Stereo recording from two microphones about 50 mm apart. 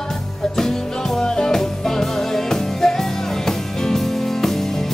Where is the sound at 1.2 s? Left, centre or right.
Centre.